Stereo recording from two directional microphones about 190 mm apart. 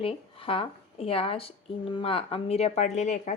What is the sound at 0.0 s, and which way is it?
A woman's voice, 30° left (ahead or behind).